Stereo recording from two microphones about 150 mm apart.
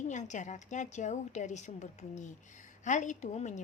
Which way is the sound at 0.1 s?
55° left (ahead or behind).